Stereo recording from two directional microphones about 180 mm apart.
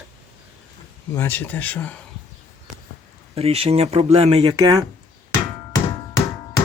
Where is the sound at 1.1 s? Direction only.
10° left (ahead or behind).